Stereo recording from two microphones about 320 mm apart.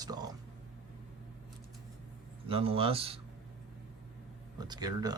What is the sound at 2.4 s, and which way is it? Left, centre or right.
Speech, centre.